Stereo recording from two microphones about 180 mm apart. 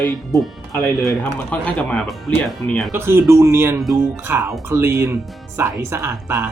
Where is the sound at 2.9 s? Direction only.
15° right (ahead or behind).